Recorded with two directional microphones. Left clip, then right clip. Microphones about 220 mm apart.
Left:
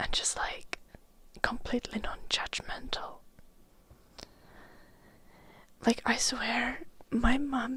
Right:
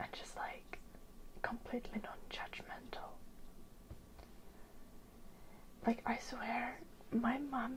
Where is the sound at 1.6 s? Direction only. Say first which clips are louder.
Left 10 dB; 90° left.